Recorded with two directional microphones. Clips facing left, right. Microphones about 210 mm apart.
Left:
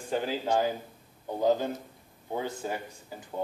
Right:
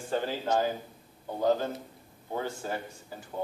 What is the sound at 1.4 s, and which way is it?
Speech, 15° left (ahead or behind).